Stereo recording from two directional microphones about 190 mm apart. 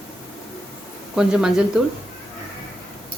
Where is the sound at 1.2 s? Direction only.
5° right (ahead or behind).